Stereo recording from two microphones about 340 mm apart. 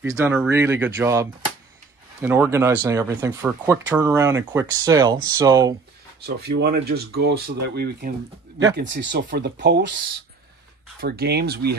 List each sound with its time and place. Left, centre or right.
0.0 s speech: centre
6.6 s speech: right
11.0 s speech: right